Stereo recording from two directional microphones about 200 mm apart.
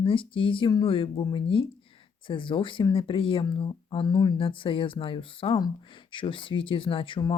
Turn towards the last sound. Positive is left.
turn(degrees=25)  # may be behind; listen again after turning